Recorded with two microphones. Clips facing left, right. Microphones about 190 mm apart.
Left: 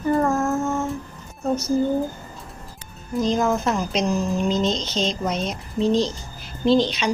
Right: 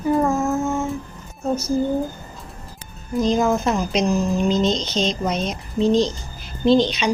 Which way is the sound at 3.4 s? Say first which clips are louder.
Right 2 dB; 10° right (ahead or behind).